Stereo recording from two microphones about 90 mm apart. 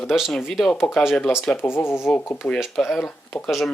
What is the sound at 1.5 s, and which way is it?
Speech, 25° left (ahead or behind).